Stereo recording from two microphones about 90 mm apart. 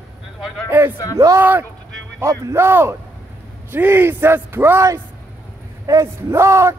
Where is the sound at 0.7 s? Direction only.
20° right (ahead or behind).